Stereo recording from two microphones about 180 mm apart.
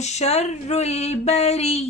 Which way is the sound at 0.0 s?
40° left (ahead or behind).